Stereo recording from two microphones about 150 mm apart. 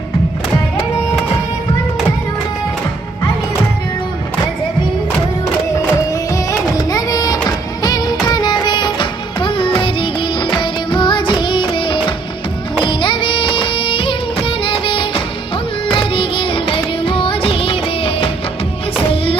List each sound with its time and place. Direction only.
6.3 s music: 25° left (ahead or behind)